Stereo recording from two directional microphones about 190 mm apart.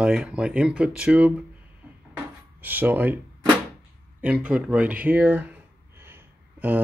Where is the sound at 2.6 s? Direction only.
10° right (ahead or behind).